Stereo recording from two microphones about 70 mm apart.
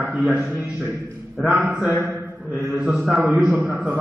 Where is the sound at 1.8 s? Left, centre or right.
Right.